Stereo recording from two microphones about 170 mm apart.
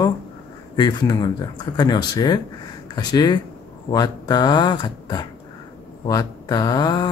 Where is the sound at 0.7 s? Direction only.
25° left (ahead or behind).